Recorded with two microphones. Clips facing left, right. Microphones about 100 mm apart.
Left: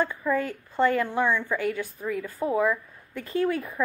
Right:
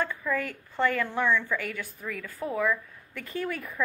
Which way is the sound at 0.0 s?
20° left (ahead or behind).